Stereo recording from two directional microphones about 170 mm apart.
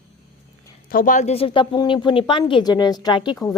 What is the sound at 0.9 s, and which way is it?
A woman's voice, 55° left (ahead or behind).